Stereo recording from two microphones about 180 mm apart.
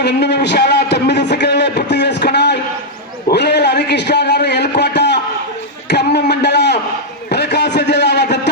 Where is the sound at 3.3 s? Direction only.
70° left (ahead or behind).